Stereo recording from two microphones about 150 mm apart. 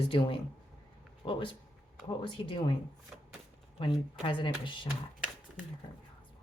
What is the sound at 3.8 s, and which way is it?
Speech, 35° left (ahead or behind).